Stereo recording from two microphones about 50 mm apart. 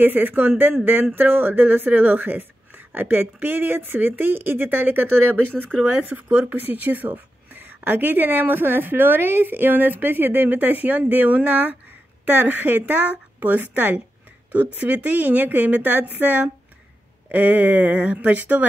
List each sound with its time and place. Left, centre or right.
0.0 s a woman's voice: right
6.3 s a woman's voice: right